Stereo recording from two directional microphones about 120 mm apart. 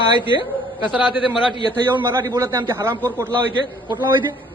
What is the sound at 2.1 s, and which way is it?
Speech, 25° right (ahead or behind).